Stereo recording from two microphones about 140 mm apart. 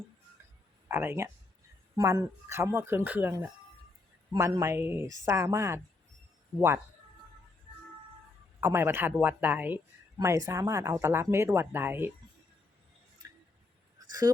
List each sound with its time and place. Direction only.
0.9 s speech: 15° right (ahead or behind)
8.6 s speech: 15° right (ahead or behind)
10.2 s speech: 25° right (ahead or behind)
13.2 s a sound: 25° right (ahead or behind)
14.1 s speech: 25° right (ahead or behind)